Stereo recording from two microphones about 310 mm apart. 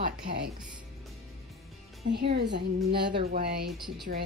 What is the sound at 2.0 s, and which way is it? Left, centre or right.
A woman's voice, right.